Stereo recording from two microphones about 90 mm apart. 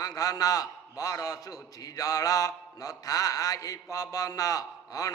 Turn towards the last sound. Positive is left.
turn(degrees=40)  # may be behind; listen again after turning